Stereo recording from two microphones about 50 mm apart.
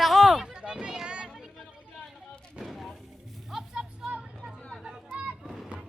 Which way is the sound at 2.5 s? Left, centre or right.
Centre.